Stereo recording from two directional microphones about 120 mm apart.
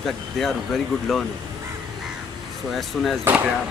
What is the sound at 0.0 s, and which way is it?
Speech, centre (ahead or behind).